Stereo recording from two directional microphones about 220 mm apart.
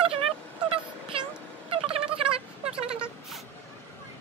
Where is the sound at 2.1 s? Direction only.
25° right (ahead or behind).